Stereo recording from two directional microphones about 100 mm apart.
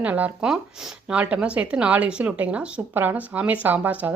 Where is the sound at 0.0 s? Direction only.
15° right (ahead or behind).